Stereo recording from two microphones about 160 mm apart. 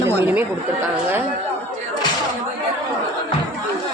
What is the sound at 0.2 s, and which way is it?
Speech, 15° right (ahead or behind).